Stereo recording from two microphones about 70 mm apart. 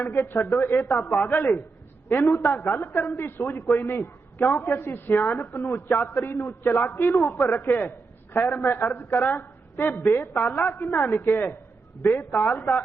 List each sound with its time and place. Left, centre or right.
0.0 s a man's voice: left